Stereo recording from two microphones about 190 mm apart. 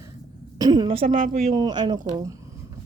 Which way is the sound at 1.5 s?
20° right (ahead or behind).